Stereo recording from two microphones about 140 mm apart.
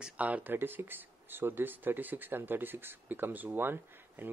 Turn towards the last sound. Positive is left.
turn(degrees=-15)  # may be behind; listen again after turning